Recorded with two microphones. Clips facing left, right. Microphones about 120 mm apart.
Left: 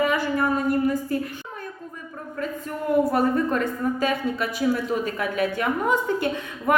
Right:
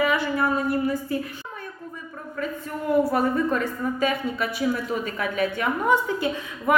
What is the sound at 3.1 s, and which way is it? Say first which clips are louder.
A woman's voice: left 1 dB; 50° left (ahead or behind).